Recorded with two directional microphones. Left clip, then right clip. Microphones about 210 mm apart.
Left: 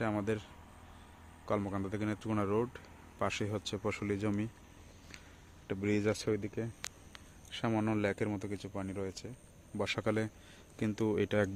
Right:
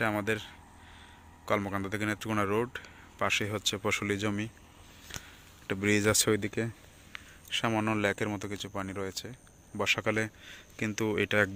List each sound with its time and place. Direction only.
0.0 s speech: centre (ahead or behind)
5.1 s a sound: 5° left (ahead or behind)
5.6 s speech: 5° right (ahead or behind); by 6.7 s 25° right (ahead or behind)
7.5 s speech: centre (ahead or behind)
9.7 s speech: 5° left (ahead or behind)